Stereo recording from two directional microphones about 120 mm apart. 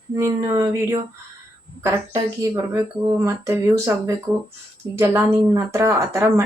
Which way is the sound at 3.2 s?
25° right (ahead or behind).